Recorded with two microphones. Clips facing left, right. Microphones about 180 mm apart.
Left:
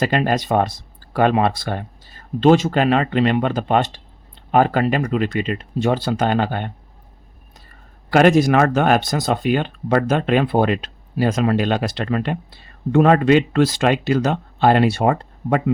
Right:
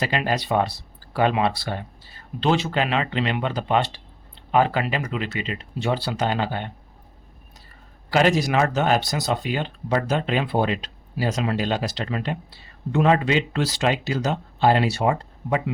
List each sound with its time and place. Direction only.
0.0 s speech: 50° left (ahead or behind)
8.1 s speech: 55° left (ahead or behind)